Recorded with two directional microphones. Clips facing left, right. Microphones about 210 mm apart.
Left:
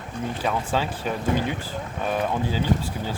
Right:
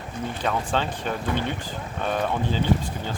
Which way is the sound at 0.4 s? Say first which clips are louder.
Even; 5° left (ahead or behind).